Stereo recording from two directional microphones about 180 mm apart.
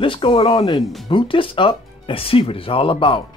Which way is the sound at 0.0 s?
30° left (ahead or behind).